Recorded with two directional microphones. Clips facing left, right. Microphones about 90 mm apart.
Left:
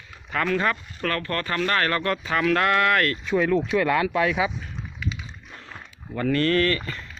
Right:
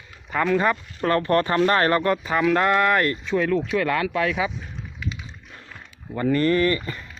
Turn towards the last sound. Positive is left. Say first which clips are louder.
# right 2 dB
turn(degrees=-15)  # may be behind; listen again after turning